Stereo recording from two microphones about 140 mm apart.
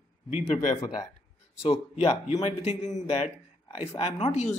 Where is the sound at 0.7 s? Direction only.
30° left (ahead or behind).